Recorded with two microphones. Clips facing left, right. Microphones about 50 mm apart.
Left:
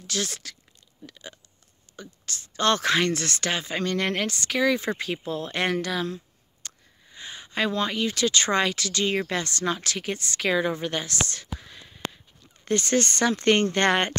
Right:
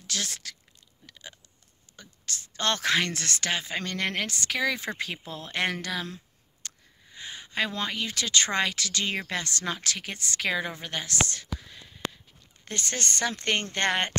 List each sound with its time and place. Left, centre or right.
0.0 s speech: left
2.0 s speech: left; by 5.2 s centre
5.2 s speech: centre
9.0 s speech: centre
9.4 s speech: left
11.2 s speech: left
12.6 s speech: left